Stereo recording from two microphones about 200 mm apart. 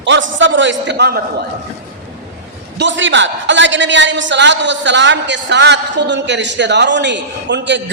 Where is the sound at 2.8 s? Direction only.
65° right (ahead or behind).